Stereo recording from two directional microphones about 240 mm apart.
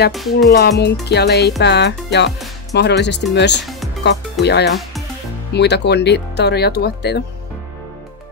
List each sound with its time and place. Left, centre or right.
0.1 s music: centre
0.5 s speech: left